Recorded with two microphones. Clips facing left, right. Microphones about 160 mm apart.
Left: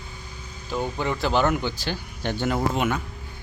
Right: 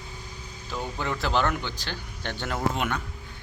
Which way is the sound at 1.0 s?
Centre (ahead or behind).